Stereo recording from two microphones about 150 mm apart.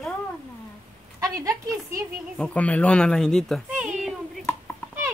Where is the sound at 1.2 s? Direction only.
20° right (ahead or behind).